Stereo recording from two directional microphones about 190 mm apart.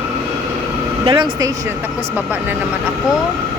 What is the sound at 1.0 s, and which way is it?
Speech, 25° right (ahead or behind).